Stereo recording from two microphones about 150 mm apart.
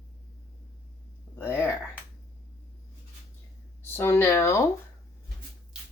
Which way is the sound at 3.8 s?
15° left (ahead or behind).